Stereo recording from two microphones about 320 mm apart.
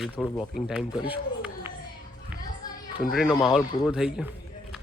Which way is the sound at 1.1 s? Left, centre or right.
Centre.